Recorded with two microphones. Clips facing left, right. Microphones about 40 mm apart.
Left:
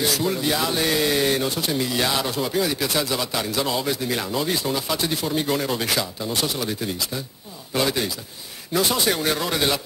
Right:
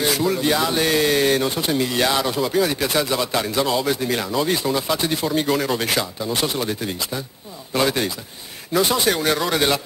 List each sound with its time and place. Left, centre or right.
0.4 s speech: centre
9.1 s speech: centre